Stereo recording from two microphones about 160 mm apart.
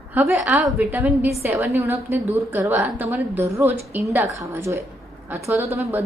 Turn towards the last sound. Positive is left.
turn(degrees=-15)  # may be behind; listen again after turning